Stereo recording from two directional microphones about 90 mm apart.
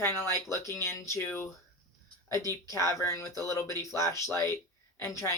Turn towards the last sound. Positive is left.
turn(degrees=30)  # may be behind; listen again after turning